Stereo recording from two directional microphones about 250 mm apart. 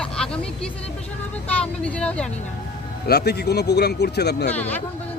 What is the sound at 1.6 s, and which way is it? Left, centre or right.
Speech, centre.